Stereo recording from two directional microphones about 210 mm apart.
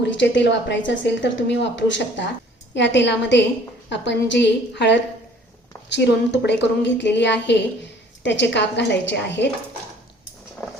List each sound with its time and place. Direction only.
0.0 s a woman's voice: 60° left (ahead or behind)